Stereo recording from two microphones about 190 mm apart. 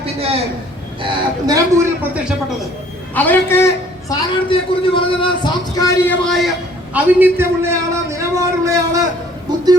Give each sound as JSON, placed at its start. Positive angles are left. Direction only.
{"t": 0.0, "sound": "a sound", "side_deg": -30}
{"t": 1.0, "sound": "a man's voice", "side_deg": -20}
{"t": 3.2, "sound": "a man's voice", "side_deg": 10}
{"t": 4.1, "sound": "speech", "side_deg": 25}
{"t": 6.1, "sound": "a man's voice", "side_deg": 0}
{"t": 6.9, "sound": "a man's voice", "side_deg": -10}